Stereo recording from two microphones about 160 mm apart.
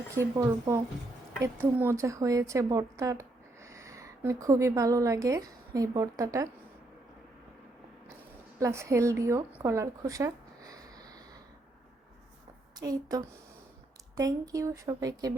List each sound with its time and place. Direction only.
0.1 s a woman's voice: 20° right (ahead or behind)
8.5 s speech: 20° right (ahead or behind)
9.6 s a sound: 20° right (ahead or behind)
12.8 s speech: 20° right (ahead or behind)